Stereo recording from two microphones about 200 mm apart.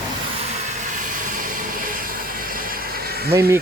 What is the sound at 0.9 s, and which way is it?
Vehicle, 40° right (ahead or behind).